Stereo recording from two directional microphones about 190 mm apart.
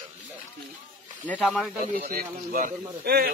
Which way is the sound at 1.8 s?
50° right (ahead or behind).